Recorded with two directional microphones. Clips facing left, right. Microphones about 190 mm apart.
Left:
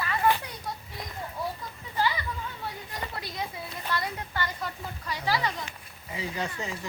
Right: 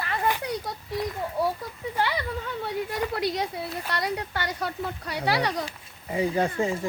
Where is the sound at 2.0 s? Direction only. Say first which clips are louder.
Right 1 dB; 65° right (ahead or behind).